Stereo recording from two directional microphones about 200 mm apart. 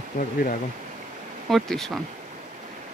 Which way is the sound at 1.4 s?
Centre (ahead or behind).